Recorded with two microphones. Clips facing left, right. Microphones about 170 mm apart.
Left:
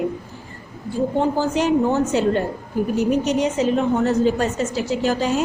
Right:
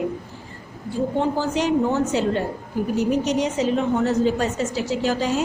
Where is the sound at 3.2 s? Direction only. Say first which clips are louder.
Left 2 dB; 55° left (ahead or behind).